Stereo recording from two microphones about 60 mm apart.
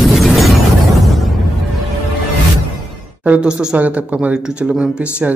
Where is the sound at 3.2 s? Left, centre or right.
Centre.